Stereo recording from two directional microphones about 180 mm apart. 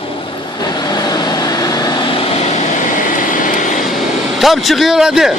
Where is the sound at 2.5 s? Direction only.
45° left (ahead or behind).